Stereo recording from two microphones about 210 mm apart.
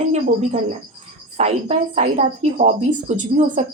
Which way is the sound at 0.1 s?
35° right (ahead or behind).